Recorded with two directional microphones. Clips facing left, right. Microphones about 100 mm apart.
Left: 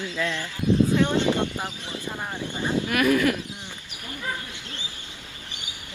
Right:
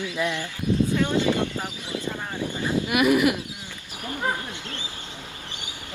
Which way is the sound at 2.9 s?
15° right (ahead or behind).